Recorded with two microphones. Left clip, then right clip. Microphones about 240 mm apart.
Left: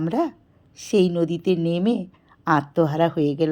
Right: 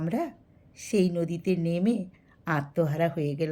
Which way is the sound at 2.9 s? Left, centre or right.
Left.